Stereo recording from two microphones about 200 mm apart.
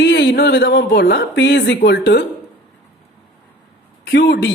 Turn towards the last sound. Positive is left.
turn(degrees=55)  # may be behind; listen again after turning